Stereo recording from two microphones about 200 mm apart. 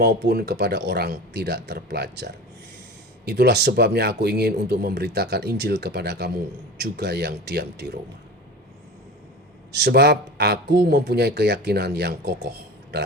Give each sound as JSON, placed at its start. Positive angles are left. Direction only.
{"t": 0.0, "sound": "speech", "side_deg": -55}
{"t": 9.7, "sound": "speech", "side_deg": -55}